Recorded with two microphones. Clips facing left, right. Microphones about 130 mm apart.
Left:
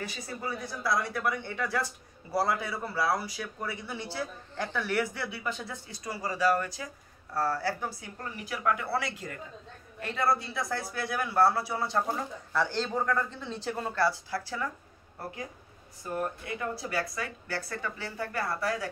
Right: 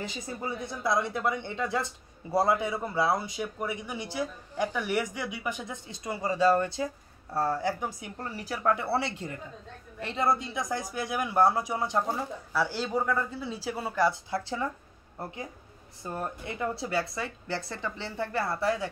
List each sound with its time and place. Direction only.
0.0 s speech: 20° right (ahead or behind)
8.2 s a man's voice: 35° right (ahead or behind); by 14.0 s 5° right (ahead or behind)
14.0 s speech: 20° right (ahead or behind)
16.0 s speech: 25° right (ahead or behind)